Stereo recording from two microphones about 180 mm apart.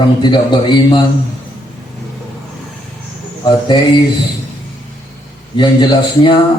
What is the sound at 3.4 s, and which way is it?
Speech, 25° left (ahead or behind).